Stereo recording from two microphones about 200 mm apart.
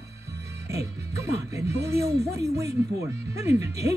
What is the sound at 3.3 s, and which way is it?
Speech, 15° right (ahead or behind).